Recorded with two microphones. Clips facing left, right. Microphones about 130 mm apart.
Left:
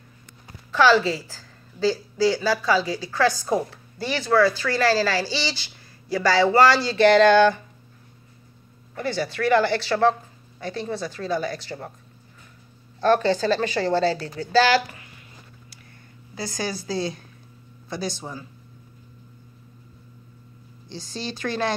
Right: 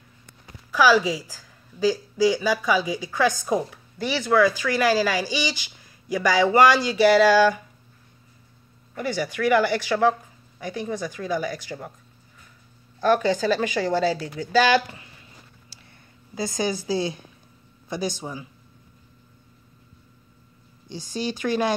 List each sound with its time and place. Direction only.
0.7 s a woman's voice: 10° right (ahead or behind)
8.9 s speech: 15° right (ahead or behind)
13.0 s speech: 10° right (ahead or behind)
16.3 s speech: 20° right (ahead or behind)
20.9 s speech: 15° right (ahead or behind)